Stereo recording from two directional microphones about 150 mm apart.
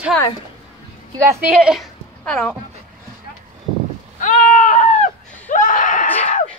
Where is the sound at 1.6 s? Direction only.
Centre (ahead or behind).